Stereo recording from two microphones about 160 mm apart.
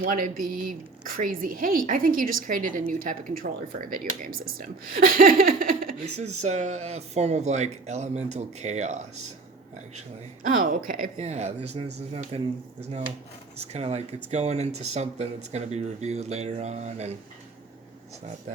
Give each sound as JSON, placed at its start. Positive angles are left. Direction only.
{"t": 0.0, "sound": "speech", "side_deg": -60}
{"t": 6.2, "sound": "speech", "side_deg": -45}
{"t": 10.4, "sound": "speech", "side_deg": -60}
{"t": 11.2, "sound": "speech", "side_deg": -45}
{"t": 13.7, "sound": "speech", "side_deg": -40}